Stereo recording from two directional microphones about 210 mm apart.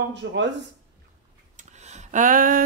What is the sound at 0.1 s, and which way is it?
Speech, 60° right (ahead or behind).